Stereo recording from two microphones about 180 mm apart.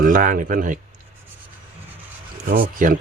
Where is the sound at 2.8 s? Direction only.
50° right (ahead or behind).